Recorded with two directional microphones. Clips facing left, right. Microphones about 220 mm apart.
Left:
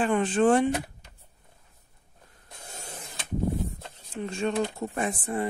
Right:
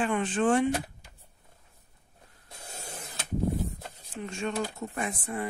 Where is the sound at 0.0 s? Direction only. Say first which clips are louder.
Left 4 dB; 35° left (ahead or behind).